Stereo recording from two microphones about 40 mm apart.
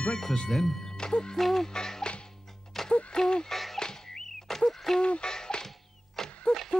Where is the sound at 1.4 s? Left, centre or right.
Centre.